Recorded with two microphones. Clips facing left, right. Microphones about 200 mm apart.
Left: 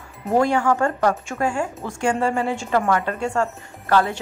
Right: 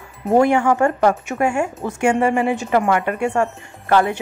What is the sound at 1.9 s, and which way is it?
A woman's voice, 20° right (ahead or behind).